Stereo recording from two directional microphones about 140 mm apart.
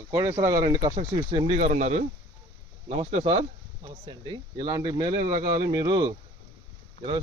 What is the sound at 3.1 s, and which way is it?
Speech, 50° right (ahead or behind).